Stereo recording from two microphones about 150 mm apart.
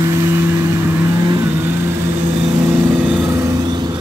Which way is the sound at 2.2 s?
45° right (ahead or behind).